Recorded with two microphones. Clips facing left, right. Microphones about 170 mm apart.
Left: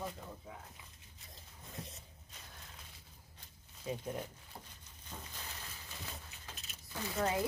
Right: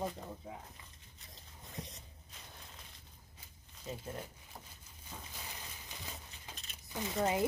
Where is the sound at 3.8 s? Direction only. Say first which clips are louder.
Left 4 dB; 10° left (ahead or behind).